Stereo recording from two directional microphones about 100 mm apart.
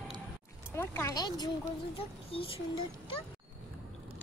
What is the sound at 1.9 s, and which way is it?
Speech, 70° left (ahead or behind).